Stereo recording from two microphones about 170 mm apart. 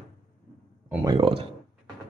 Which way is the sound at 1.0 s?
25° right (ahead or behind).